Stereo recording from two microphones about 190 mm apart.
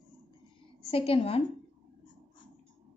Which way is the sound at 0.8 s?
30° left (ahead or behind).